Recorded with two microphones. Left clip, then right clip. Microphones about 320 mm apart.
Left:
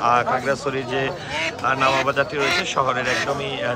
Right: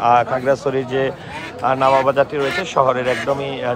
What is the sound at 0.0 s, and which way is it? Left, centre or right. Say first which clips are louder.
A man's voice: right 4 dB; right.